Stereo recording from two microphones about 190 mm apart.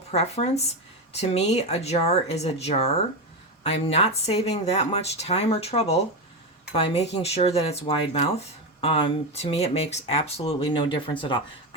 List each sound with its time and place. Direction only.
0.1 s speech: 35° left (ahead or behind)